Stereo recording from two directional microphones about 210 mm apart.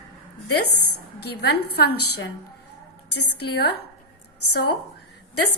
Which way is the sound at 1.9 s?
90° left.